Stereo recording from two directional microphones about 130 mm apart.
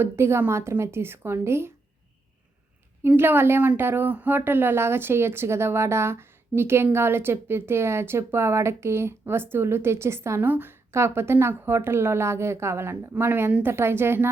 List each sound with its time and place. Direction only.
0.0 s speech: 20° right (ahead or behind)
3.0 s speech: 15° right (ahead or behind)